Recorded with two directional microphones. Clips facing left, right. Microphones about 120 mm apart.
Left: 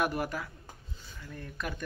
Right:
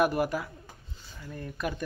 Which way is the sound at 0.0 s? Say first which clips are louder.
Right 5 dB; 5° right (ahead or behind).